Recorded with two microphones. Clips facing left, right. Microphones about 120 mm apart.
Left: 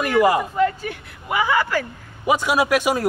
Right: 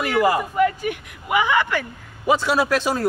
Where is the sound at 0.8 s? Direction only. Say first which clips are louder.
Right 4 dB; 15° right (ahead or behind).